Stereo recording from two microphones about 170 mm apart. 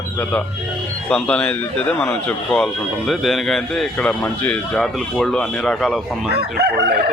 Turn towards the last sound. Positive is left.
turn(degrees=-75)  # may be behind; listen again after turning